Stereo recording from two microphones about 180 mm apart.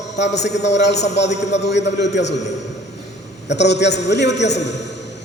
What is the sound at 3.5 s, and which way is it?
A man's voice, 70° left (ahead or behind).